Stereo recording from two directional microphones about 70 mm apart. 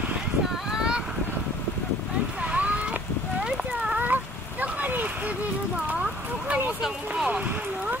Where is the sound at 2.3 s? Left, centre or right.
Centre.